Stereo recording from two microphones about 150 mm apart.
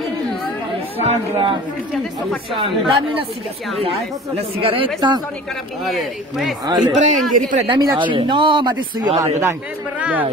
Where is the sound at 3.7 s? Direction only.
40° right (ahead or behind).